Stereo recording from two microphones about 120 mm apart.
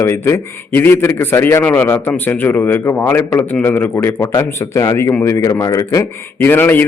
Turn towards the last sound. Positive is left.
turn(degrees=15)  # may be behind; listen again after turning